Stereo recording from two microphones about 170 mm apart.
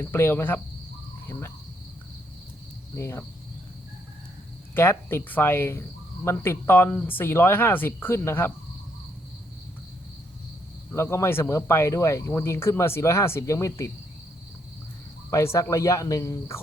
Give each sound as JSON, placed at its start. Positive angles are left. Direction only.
{"t": 0.0, "sound": "speech", "side_deg": 15}
{"t": 2.9, "sound": "speech", "side_deg": 15}
{"t": 4.7, "sound": "speech", "side_deg": 15}
{"t": 10.9, "sound": "speech", "side_deg": 15}
{"t": 15.3, "sound": "speech", "side_deg": 20}